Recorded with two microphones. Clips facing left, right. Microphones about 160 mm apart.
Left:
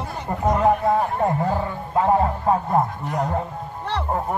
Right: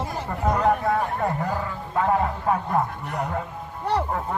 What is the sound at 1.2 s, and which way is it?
Speech, 25° left (ahead or behind).